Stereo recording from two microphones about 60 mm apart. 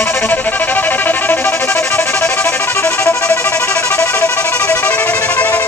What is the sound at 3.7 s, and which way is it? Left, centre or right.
Music, centre.